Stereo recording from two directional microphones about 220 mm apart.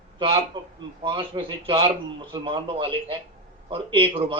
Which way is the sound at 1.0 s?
20° right (ahead or behind).